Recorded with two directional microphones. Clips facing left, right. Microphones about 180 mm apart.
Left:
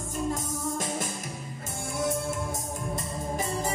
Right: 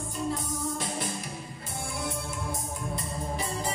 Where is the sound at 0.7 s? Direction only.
45° left (ahead or behind).